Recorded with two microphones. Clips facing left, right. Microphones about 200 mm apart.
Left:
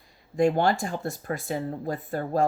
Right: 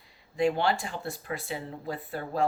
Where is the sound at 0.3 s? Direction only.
45° left (ahead or behind).